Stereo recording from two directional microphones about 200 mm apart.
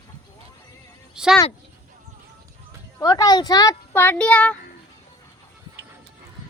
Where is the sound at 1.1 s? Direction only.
5° right (ahead or behind).